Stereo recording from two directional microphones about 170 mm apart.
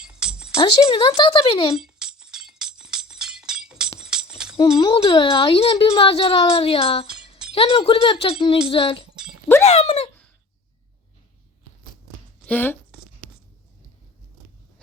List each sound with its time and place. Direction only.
0.0 s music: 5° right (ahead or behind)
0.9 s speech: 30° left (ahead or behind)
1.7 s music: 5° right (ahead or behind)
4.8 s speech: 30° left (ahead or behind)
9.1 s a sound: 5° right (ahead or behind)
9.6 s speech: 40° left (ahead or behind)
12.5 s speech: 10° left (ahead or behind)
12.9 s writing: 5° right (ahead or behind)